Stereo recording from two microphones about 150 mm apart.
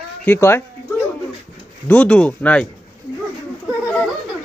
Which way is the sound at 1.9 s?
10° left (ahead or behind).